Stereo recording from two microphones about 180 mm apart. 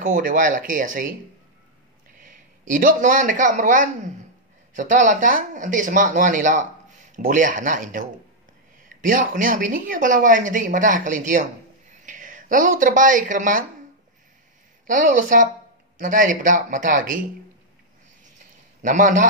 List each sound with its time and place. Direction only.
0.0 s speech: 50° right (ahead or behind)
2.1 s a man's voice: 50° right (ahead or behind)
14.9 s speech: 45° right (ahead or behind)
18.8 s a man's voice: 45° right (ahead or behind)